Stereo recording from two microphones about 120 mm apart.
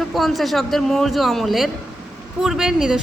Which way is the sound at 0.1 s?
Centre (ahead or behind).